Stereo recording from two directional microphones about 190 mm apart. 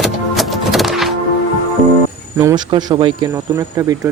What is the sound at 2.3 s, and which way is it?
Speech, 15° right (ahead or behind).